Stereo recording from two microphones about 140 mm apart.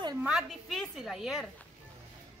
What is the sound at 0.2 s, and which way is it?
A woman's voice, 5° right (ahead or behind).